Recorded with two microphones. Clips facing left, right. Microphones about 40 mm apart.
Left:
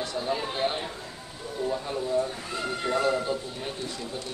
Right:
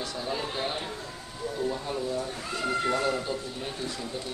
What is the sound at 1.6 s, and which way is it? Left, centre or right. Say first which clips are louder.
Speech: left 2 dB; centre.